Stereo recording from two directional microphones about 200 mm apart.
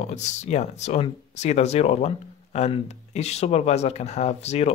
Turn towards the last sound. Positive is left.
turn(degrees=35)  # may be behind; listen again after turning